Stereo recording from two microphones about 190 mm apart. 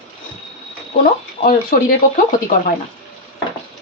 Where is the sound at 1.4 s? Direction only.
50° left (ahead or behind).